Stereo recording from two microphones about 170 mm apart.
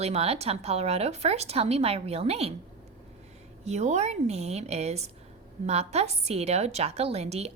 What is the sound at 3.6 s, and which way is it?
A woman's voice, 40° right (ahead or behind).